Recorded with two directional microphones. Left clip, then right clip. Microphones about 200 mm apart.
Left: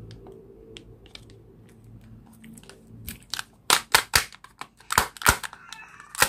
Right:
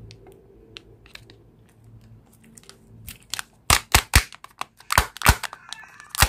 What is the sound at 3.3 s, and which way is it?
Typewriter, 15° right (ahead or behind).